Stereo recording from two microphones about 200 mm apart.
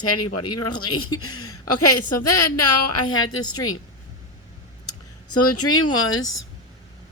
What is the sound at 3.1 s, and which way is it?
Speech, 90° left.